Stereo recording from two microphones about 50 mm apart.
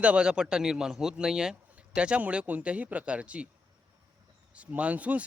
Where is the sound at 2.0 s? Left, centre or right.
Right.